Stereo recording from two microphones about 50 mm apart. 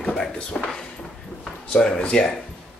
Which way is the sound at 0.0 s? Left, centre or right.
Centre.